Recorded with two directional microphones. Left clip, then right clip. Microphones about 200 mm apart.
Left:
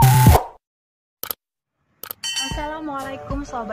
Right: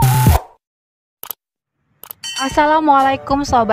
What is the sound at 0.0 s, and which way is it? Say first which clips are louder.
Music: left 1 dB; 10° right (ahead or behind).